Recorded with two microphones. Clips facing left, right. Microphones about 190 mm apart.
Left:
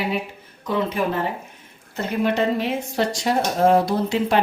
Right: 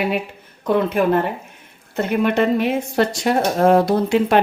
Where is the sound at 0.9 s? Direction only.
60° right (ahead or behind).